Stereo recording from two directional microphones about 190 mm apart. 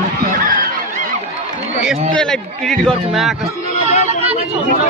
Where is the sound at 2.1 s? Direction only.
5° left (ahead or behind).